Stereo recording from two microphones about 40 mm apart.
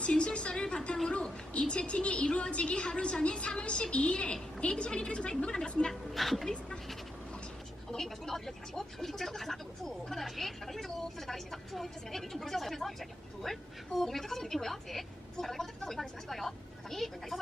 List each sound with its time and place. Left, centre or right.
0.0 s a woman's voice: left
5.9 s speech: centre
7.9 s speech: centre